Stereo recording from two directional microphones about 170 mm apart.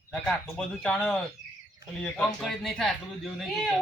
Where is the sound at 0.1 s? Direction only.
5° left (ahead or behind).